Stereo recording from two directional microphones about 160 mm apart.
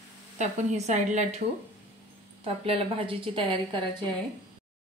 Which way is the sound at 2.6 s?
35° right (ahead or behind).